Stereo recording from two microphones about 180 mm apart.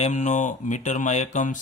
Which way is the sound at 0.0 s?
40° left (ahead or behind).